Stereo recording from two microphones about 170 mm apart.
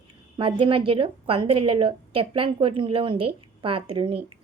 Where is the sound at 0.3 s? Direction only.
30° right (ahead or behind).